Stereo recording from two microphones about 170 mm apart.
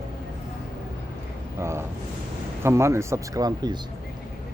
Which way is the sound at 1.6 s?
15° right (ahead or behind).